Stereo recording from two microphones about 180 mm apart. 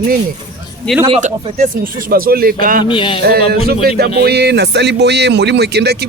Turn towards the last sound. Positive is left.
turn(degrees=-65)  # may be behind; listen again after turning